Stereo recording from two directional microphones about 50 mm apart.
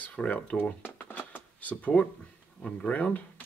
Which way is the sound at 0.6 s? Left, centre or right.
Left.